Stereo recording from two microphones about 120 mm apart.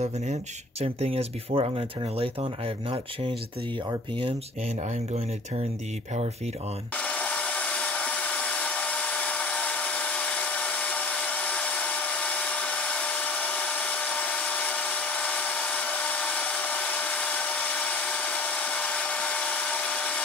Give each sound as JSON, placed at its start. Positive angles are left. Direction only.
{"t": 0.0, "sound": "speech", "side_deg": -65}
{"t": 7.0, "sound": "wood", "side_deg": 10}